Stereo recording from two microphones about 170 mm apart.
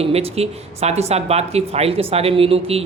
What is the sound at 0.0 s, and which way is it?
A man's voice, 35° right (ahead or behind).